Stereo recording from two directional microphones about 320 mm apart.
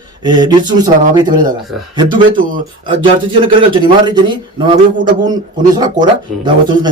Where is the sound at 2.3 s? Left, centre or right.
Right.